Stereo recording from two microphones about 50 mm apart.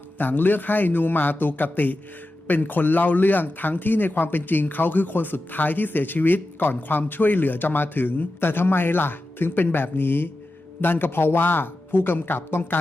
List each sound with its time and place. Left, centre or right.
0.2 s speech: left